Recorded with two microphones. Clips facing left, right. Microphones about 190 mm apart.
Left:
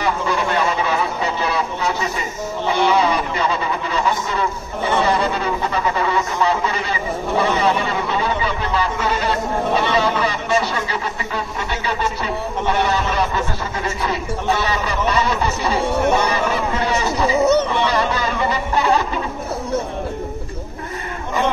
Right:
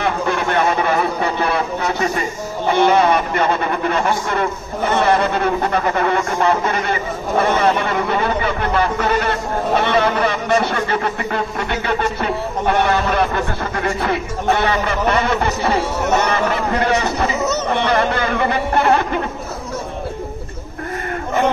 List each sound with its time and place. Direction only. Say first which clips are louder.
0.0 s speech: right 1 dB; 55° right (ahead or behind)
17.4 s speech: left 5 dB; 30° left (ahead or behind)
17.6 s speech: right 2 dB; 55° right (ahead or behind)